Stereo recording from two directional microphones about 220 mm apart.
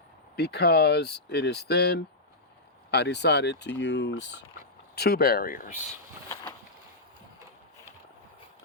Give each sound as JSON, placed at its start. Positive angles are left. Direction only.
{"t": 0.3, "sound": "speech", "side_deg": 45}